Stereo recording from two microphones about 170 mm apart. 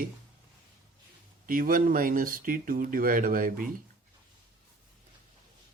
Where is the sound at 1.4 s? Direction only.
55° right (ahead or behind).